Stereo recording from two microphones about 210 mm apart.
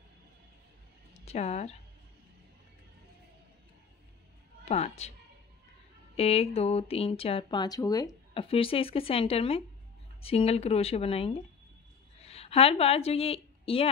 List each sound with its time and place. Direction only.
1.2 s speech: 30° left (ahead or behind)
4.6 s a woman's voice: 30° left (ahead or behind)
6.1 s a woman's voice: 30° left (ahead or behind)